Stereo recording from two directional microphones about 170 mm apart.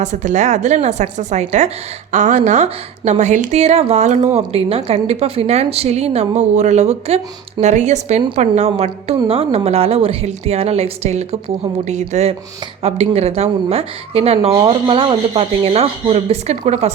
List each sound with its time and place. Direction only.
0.0 s a woman's voice: 45° right (ahead or behind)